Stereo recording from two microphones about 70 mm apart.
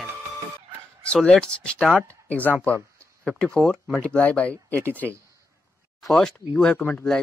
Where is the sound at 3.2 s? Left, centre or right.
Centre.